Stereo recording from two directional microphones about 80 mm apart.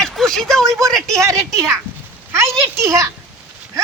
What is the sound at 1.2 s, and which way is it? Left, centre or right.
Speech, right.